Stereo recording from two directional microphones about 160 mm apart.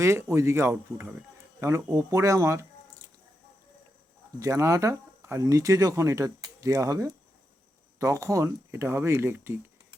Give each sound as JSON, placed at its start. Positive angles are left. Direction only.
{"t": 0.0, "sound": "speech", "side_deg": -15}
{"t": 4.4, "sound": "speech", "side_deg": -20}